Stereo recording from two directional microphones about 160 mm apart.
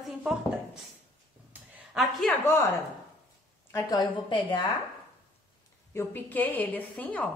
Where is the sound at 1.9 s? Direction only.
Centre (ahead or behind).